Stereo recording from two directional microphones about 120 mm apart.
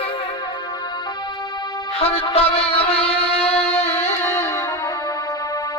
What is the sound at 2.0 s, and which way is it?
Music, 55° left (ahead or behind).